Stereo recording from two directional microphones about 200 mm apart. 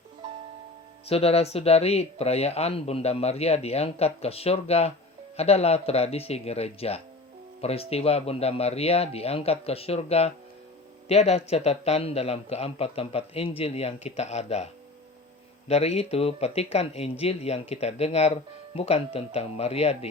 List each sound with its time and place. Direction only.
1.0 s speech: 30° left (ahead or behind)